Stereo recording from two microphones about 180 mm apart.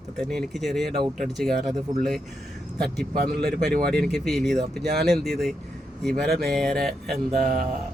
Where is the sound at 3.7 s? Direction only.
60° right (ahead or behind).